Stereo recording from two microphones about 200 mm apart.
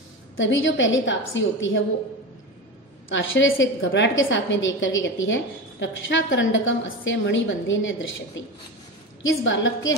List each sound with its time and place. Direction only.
0.4 s a woman's voice: 70° left (ahead or behind)
3.1 s a woman's voice: 70° left (ahead or behind)